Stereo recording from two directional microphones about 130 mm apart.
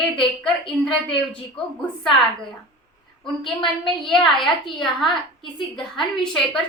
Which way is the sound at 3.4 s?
40° left (ahead or behind).